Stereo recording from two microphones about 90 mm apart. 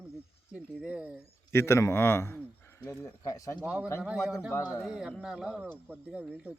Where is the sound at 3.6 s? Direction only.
15° right (ahead or behind).